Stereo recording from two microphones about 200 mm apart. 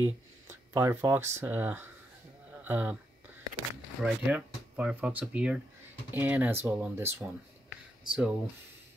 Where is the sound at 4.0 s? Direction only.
5° right (ahead or behind).